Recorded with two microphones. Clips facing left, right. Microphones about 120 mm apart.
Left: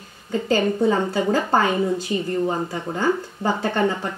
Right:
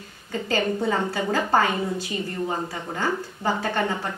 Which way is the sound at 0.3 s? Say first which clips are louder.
Left 4 dB; 25° left (ahead or behind).